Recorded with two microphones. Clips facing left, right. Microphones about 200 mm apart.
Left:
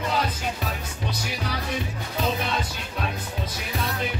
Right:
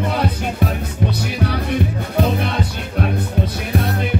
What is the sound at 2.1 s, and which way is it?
Music, 60° right (ahead or behind).